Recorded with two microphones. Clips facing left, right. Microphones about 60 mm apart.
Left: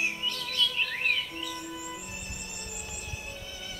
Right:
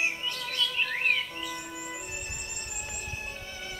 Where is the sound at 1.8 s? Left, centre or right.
Right.